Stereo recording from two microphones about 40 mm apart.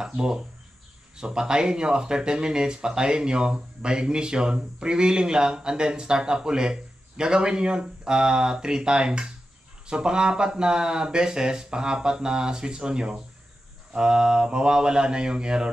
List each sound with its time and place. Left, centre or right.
0.1 s speech: right